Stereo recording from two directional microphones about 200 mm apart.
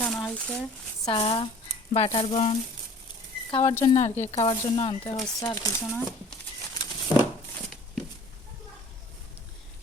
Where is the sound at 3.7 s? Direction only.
15° left (ahead or behind).